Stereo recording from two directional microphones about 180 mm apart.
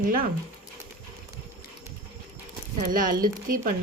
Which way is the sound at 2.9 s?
50° right (ahead or behind).